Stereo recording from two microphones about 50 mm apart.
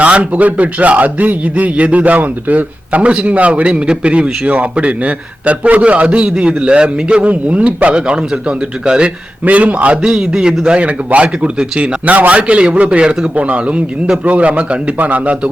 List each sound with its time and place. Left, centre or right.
0.0 s a man's voice: right
9.4 s a man's voice: right
12.0 s a man's voice: right